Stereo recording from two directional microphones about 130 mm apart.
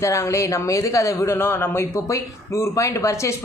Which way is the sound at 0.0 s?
25° left (ahead or behind).